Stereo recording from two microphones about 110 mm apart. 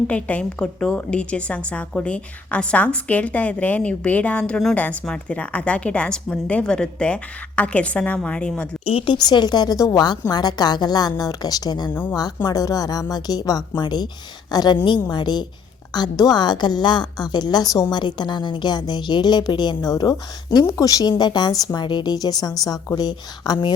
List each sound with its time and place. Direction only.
0.1 s a woman's voice: 10° left (ahead or behind)
8.8 s a woman's voice: 60° left (ahead or behind)
9.1 s a woman's voice: 40° left (ahead or behind)
11.9 s a woman's voice: 15° left (ahead or behind)
12.5 s a woman's voice: 35° left (ahead or behind)